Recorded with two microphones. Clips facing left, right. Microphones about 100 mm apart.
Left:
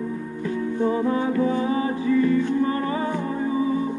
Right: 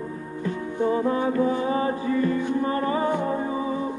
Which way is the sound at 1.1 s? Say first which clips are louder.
Left 1 dB; 35° right (ahead or behind).